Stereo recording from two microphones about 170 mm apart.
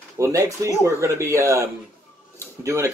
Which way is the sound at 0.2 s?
15° right (ahead or behind).